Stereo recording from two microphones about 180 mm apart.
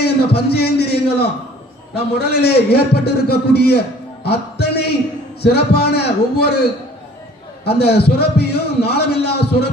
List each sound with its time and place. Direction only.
0.0 s a man's voice: 65° left (ahead or behind)